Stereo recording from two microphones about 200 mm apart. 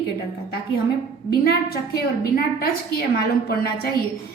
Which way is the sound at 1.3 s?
50° left (ahead or behind).